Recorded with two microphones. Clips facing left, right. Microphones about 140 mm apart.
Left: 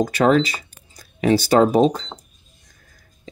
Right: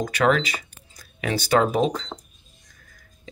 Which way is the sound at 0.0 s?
35° left (ahead or behind).